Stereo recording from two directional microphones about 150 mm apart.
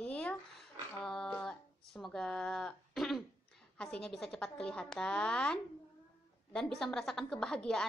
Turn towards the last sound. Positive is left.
turn(degrees=5)  # may be behind; listen again after turning